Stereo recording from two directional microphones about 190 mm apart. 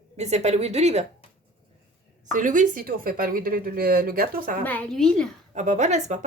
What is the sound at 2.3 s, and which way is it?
A woman's voice, 45° right (ahead or behind).